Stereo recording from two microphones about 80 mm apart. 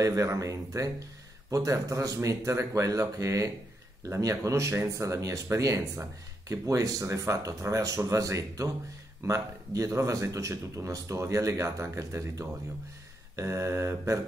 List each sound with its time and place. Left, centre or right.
0.0 s speech: right